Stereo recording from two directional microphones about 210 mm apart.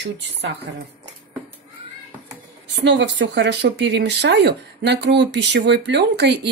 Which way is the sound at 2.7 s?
55° right (ahead or behind).